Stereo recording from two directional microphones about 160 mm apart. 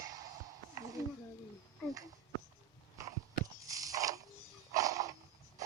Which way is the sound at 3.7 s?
20° right (ahead or behind).